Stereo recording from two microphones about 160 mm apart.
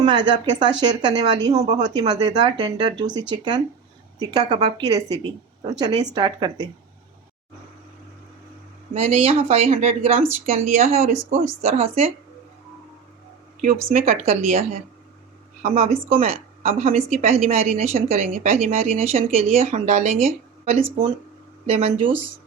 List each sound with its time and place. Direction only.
0.0 s speech: 25° right (ahead or behind)
1.5 s speech: 40° right (ahead or behind)
1.8 s speech: 25° right (ahead or behind)
8.9 s speech: 40° right (ahead or behind)
13.9 s a woman's voice: 45° right (ahead or behind)